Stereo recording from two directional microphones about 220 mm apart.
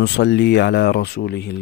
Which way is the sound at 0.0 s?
50° left (ahead or behind).